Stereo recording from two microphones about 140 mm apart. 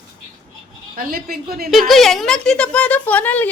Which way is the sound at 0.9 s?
90° right.